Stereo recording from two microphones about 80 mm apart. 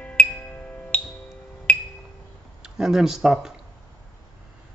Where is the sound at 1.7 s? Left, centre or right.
Centre.